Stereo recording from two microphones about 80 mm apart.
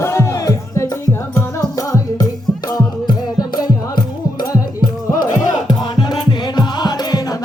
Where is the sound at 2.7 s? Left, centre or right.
Left.